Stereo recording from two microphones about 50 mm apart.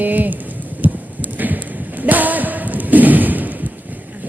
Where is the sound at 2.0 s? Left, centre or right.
Right.